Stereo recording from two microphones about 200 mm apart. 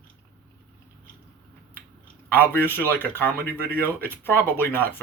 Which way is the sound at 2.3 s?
10° left (ahead or behind).